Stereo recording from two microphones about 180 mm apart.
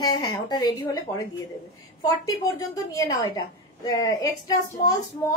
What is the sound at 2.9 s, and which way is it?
A woman's voice, 20° left (ahead or behind).